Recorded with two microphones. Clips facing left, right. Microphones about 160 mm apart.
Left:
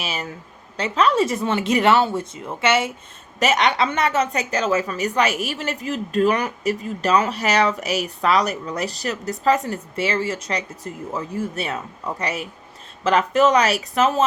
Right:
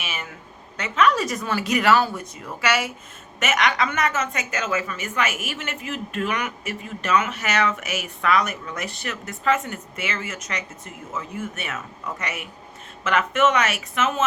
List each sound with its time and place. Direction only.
0.0 s a woman's voice: 35° left (ahead or behind)